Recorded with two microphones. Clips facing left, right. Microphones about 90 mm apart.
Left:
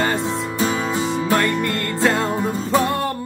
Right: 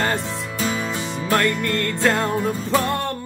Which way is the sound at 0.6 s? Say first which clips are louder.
Left 3 dB; 25° left (ahead or behind).